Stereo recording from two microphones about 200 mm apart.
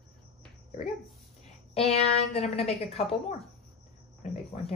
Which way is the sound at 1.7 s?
30° left (ahead or behind).